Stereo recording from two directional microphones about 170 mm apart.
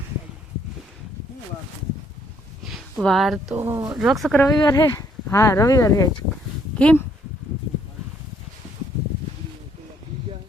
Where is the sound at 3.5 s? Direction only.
15° right (ahead or behind).